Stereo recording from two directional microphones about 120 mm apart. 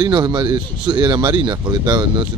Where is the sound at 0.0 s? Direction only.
40° right (ahead or behind).